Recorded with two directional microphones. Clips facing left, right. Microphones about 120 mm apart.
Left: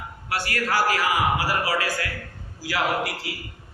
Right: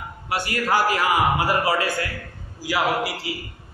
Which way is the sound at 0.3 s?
20° right (ahead or behind).